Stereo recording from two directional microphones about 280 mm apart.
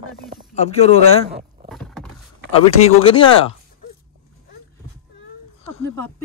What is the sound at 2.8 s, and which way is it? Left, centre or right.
Speech, centre.